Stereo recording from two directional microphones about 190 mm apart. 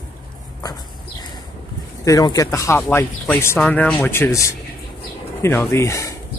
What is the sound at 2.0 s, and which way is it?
Speech, 20° left (ahead or behind).